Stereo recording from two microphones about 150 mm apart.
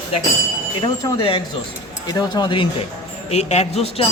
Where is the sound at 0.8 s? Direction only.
35° left (ahead or behind).